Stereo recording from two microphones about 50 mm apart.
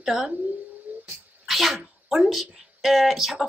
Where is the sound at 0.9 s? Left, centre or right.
Right.